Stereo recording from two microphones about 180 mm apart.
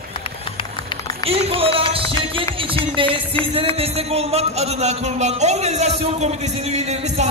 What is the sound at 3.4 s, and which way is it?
Speech, 30° right (ahead or behind).